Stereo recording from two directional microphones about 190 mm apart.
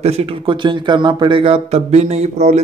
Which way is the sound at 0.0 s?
35° right (ahead or behind).